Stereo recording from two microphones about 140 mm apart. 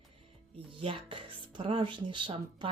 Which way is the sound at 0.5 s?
40° right (ahead or behind).